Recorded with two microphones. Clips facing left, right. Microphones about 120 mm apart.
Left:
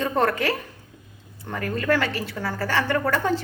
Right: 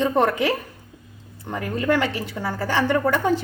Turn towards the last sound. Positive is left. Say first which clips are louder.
# right 3 dB
turn(degrees=-15)  # may be behind; listen again after turning